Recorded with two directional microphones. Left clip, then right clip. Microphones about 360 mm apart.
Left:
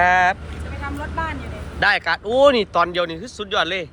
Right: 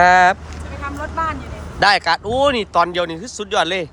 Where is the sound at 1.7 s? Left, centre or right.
Centre.